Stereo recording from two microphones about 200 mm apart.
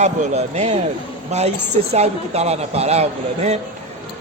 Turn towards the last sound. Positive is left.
turn(degrees=-30)  # may be behind; listen again after turning